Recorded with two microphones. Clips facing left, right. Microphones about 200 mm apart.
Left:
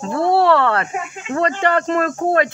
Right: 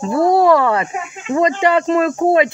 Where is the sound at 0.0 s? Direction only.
10° right (ahead or behind).